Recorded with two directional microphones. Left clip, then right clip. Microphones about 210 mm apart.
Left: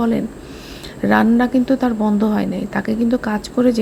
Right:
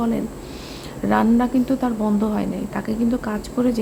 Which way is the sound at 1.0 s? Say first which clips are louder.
Left 4 dB; 10° left (ahead or behind).